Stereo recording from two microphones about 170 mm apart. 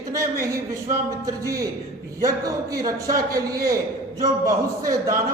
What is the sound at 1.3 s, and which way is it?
Speech, 20° right (ahead or behind).